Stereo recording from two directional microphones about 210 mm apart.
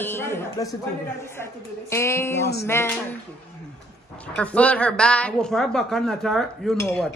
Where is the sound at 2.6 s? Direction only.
10° left (ahead or behind).